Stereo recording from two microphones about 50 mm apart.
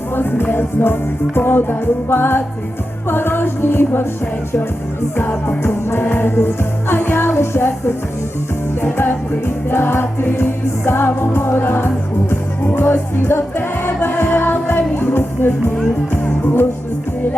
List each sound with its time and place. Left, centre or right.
0.2 s music: left
5.5 s music: left
15.1 s music: left